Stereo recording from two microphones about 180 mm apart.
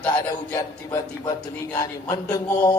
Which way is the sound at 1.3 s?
20° left (ahead or behind).